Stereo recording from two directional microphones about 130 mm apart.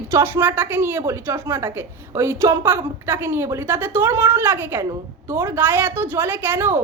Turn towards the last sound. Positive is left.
turn(degrees=-15)  # may be behind; listen again after turning